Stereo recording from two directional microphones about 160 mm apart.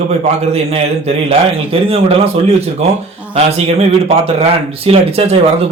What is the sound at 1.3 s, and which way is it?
Speech, 35° right (ahead or behind).